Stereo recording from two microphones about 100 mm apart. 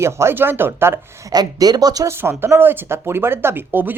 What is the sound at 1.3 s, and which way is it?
Speech, 40° right (ahead or behind).